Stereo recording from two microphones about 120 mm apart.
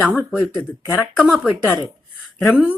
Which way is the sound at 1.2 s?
10° right (ahead or behind).